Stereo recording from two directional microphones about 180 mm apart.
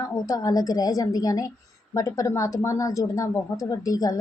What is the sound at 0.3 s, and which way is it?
A woman's voice, 20° left (ahead or behind).